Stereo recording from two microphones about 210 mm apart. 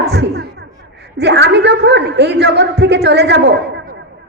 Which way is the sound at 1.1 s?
55° right (ahead or behind).